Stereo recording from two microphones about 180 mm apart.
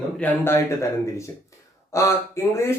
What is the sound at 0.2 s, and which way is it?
Speech, 10° left (ahead or behind).